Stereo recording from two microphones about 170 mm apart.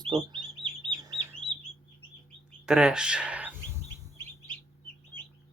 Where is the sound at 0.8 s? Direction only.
30° right (ahead or behind).